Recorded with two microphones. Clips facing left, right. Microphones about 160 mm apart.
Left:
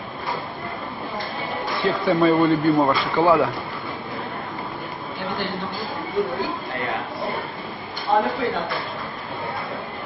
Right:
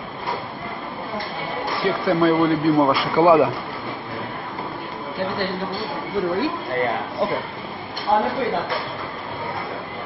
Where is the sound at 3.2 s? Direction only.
15° right (ahead or behind).